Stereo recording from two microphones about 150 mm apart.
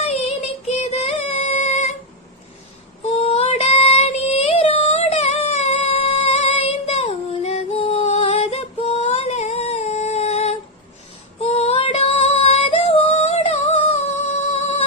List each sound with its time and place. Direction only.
0.0 s music: 45° left (ahead or behind)
3.2 s child singing: 45° left (ahead or behind)
11.3 s female singing: 45° left (ahead or behind)